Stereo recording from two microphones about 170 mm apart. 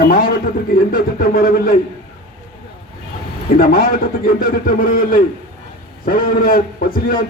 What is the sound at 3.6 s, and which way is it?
A man's voice, 60° left (ahead or behind).